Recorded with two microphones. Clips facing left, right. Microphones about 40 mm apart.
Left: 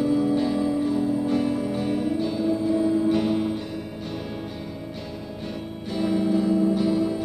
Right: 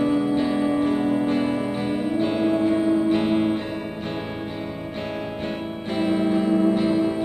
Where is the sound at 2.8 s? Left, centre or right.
Right.